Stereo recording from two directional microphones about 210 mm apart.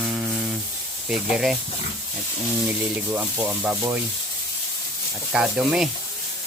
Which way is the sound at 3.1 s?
5° right (ahead or behind).